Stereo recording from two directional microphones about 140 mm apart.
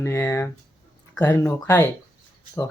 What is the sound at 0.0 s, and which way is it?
Speech, 20° left (ahead or behind).